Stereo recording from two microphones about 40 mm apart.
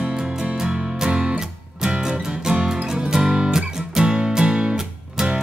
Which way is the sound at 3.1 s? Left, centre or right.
Centre.